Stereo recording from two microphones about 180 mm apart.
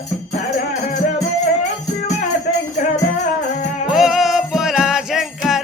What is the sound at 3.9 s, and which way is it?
Music, centre (ahead or behind).